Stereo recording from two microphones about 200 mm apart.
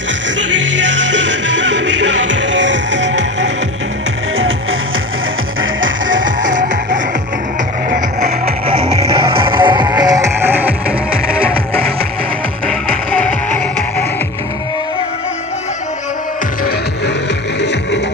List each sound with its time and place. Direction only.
0.9 s music: 65° right (ahead or behind)
5.8 s music: 70° right (ahead or behind)
8.6 s music: 30° right (ahead or behind); by 11.5 s 5° right (ahead or behind)
12.6 s music: 5° left (ahead or behind)
17.6 s music: 60° left (ahead or behind)